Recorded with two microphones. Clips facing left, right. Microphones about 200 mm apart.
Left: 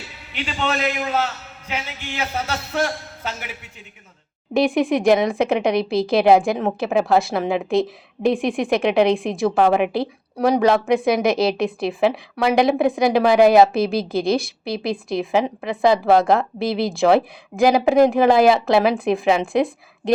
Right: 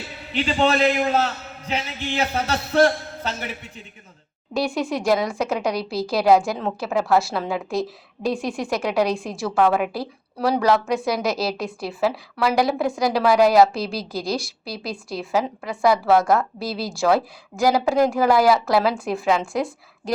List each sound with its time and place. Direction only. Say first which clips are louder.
0.3 s a man's voice: right 5 dB; 35° right (ahead or behind)
4.5 s a woman's voice: left 6 dB; 20° left (ahead or behind)